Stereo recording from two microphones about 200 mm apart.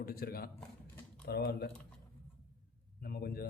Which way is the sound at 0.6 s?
5° left (ahead or behind).